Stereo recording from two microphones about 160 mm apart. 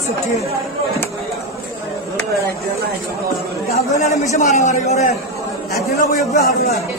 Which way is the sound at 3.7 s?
45° left (ahead or behind).